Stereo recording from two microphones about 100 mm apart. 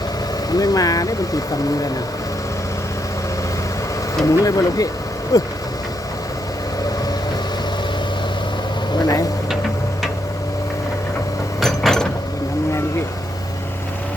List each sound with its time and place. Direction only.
0.5 s speech: 40° left (ahead or behind)
4.3 s speech: 35° left (ahead or behind)
9.0 s speech: 35° left (ahead or behind)
11.6 s a sound: 5° left (ahead or behind)